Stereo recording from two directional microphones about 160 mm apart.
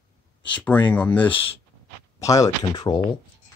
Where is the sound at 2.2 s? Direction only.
20° left (ahead or behind).